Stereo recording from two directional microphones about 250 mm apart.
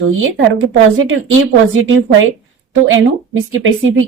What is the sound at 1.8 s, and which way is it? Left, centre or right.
Speech, right.